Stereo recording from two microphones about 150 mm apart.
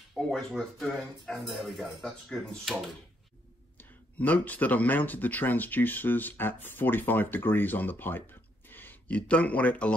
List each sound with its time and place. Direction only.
0.1 s speech: centre (ahead or behind)
4.2 s speech: 10° left (ahead or behind)